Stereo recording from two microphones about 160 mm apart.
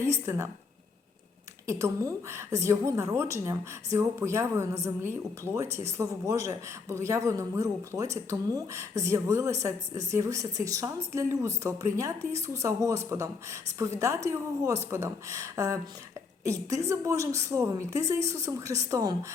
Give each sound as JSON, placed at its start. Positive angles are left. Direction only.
{"t": 0.0, "sound": "speech", "side_deg": -15}
{"t": 1.6, "sound": "a woman's voice", "side_deg": -20}